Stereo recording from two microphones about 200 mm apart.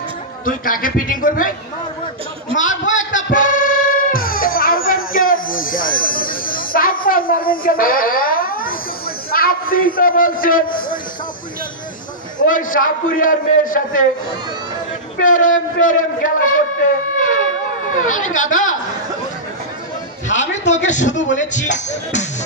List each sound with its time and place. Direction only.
0.5 s a man's voice: 45° left (ahead or behind)
2.9 s speech: 40° left (ahead or behind)
3.3 s music: 40° left (ahead or behind)
9.3 s a man's voice: 45° left (ahead or behind)
12.4 s a man's voice: 40° left (ahead or behind)
15.1 s speech: 40° left (ahead or behind)
18.0 s speech: 40° left (ahead or behind)
20.2 s a man's voice: 35° left (ahead or behind)